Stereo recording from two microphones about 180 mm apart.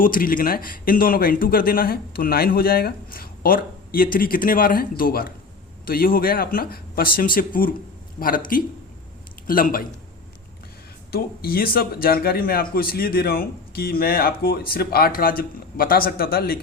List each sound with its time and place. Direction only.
0.0 s a man's voice: 50° left (ahead or behind)
11.1 s speech: 55° left (ahead or behind)